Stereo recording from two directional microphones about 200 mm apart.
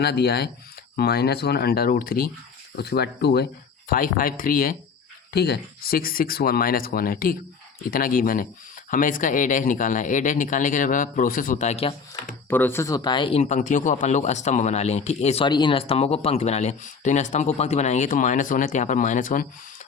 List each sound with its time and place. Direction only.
0.0 s speech: 55° left (ahead or behind)
3.8 s speech: 45° left (ahead or behind)
12.5 s speech: 10° left (ahead or behind); by 19.5 s 40° left (ahead or behind)